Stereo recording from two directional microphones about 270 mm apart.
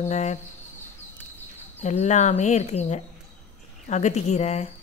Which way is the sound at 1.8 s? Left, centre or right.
Left.